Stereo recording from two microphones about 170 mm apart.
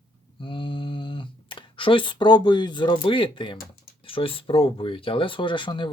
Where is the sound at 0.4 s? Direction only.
30° left (ahead or behind).